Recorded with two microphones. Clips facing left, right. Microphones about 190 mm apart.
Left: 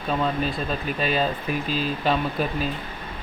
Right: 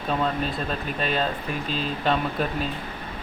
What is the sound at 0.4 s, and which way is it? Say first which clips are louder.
Speech: left 2 dB; 5° left (ahead or behind).